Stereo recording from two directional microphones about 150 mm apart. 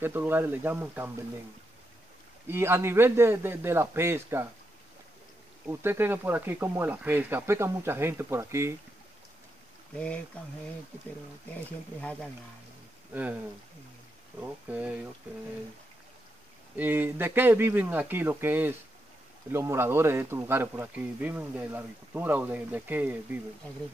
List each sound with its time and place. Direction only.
0.0 s speech: 15° right (ahead or behind)
2.4 s speech: 15° right (ahead or behind)
5.7 s speech: 15° right (ahead or behind)
9.9 s speech: 10° left (ahead or behind)
12.0 s speech: 10° left (ahead or behind)
13.1 s speech: 10° right (ahead or behind)
14.4 s speech: 10° right (ahead or behind)
16.7 s speech: 10° right (ahead or behind)